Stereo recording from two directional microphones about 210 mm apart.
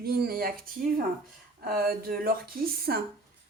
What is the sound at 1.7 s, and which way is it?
A woman's voice, 45° right (ahead or behind).